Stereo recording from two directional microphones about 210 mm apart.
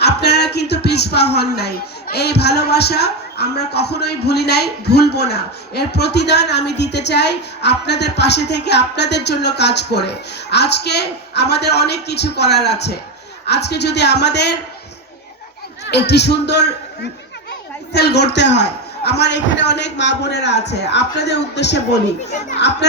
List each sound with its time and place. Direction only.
0.0 s speech: 50° left (ahead or behind)
15.8 s a man's voice: 55° left (ahead or behind)